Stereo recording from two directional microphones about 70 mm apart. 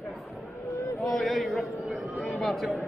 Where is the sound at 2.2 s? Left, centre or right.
Centre.